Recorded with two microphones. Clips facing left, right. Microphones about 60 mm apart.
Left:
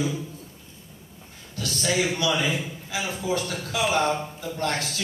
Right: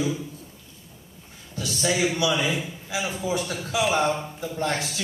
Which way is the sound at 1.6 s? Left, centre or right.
Centre.